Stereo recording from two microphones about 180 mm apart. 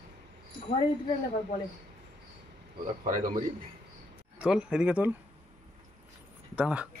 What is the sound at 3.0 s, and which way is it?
Speech, 50° right (ahead or behind).